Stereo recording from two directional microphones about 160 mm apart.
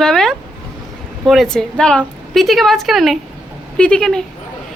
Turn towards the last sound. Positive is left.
turn(degrees=5)  # may be behind; listen again after turning